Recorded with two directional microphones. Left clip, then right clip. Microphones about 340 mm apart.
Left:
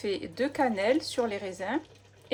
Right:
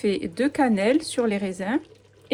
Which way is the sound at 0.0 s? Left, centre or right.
Right.